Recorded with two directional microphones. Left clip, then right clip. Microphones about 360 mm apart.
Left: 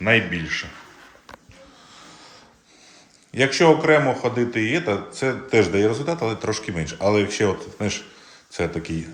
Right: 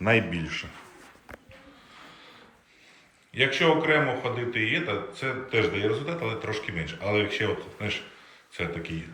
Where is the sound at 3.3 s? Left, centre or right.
Left.